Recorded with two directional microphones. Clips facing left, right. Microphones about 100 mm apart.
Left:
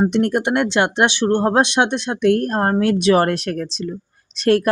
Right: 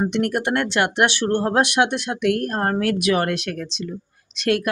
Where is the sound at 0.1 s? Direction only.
25° left (ahead or behind).